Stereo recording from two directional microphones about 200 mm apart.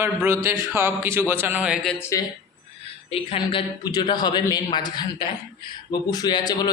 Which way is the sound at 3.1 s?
25° left (ahead or behind).